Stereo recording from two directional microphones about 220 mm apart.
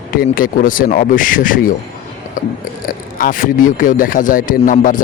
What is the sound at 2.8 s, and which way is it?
Speech, 40° left (ahead or behind).